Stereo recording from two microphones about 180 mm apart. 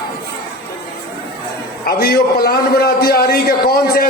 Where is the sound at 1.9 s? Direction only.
60° left (ahead or behind).